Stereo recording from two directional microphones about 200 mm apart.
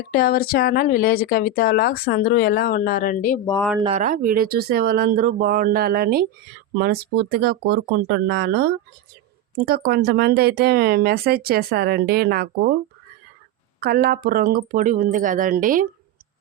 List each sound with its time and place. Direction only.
0.1 s speech: 50° left (ahead or behind)
3.8 s speech: 40° right (ahead or behind)
13.7 s speech: 50° right (ahead or behind)